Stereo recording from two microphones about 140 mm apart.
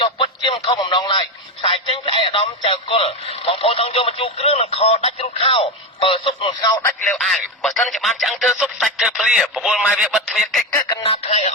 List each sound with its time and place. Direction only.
0.0 s a sound: 35° left (ahead or behind)
1.6 s speech: 40° left (ahead or behind)
7.1 s speech: centre (ahead or behind)
11.1 s speech: 50° left (ahead or behind)